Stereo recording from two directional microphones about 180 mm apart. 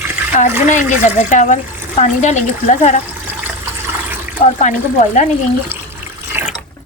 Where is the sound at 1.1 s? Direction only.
40° left (ahead or behind).